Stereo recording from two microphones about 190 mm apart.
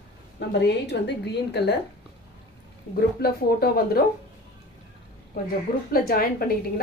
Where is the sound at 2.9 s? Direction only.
50° left (ahead or behind).